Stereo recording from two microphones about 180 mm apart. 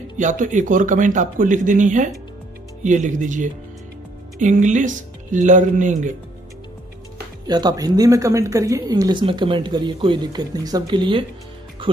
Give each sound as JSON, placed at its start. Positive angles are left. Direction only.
{"t": 0.2, "sound": "speech", "side_deg": -45}
{"t": 7.4, "sound": "a woman's voice", "side_deg": -20}